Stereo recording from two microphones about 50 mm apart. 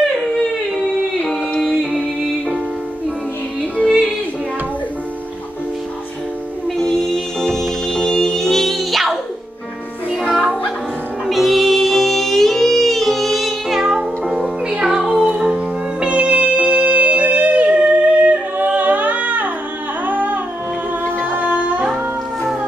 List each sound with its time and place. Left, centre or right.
3.8 s music: centre
6.8 s music: centre
10.3 s music: centre; by 19.5 s right
20.1 s humming: right
21.3 s music: right